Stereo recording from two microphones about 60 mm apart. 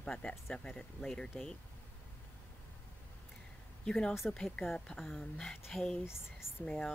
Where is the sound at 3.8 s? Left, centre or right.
Centre.